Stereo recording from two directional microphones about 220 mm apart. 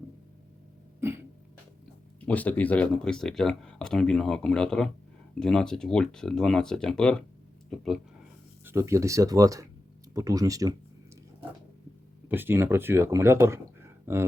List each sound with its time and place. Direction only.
0.9 s cough: 10° right (ahead or behind)
2.2 s speech: 5° left (ahead or behind)
8.6 s speech: 15° right (ahead or behind)
12.3 s speech: 10° right (ahead or behind)